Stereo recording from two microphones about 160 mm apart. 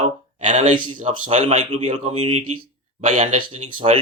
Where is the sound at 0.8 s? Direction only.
30° right (ahead or behind).